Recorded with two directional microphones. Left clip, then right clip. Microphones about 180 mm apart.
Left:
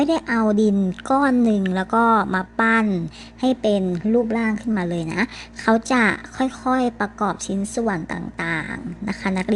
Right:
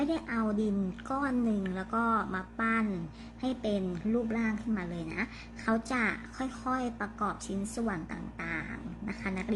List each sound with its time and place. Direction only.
0.0 s speech: 35° left (ahead or behind)